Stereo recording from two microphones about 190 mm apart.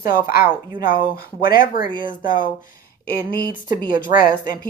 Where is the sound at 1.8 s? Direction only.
25° right (ahead or behind).